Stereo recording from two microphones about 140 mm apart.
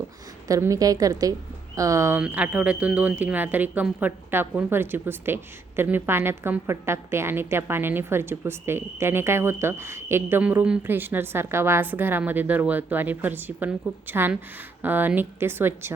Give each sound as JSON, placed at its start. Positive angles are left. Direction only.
{"t": 0.4, "sound": "speech", "side_deg": -25}
{"t": 2.2, "sound": "a woman's voice", "side_deg": -10}